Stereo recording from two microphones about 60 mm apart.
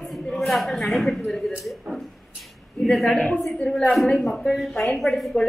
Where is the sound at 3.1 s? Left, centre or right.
Left.